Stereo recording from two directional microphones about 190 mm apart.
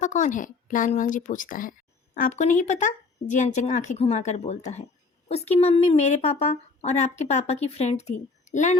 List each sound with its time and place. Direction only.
0.0 s speech: 40° left (ahead or behind)